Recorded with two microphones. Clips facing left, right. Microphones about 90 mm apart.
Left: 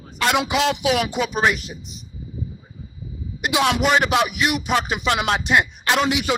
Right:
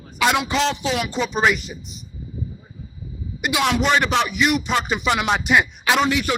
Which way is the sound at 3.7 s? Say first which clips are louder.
Even; 5° left (ahead or behind).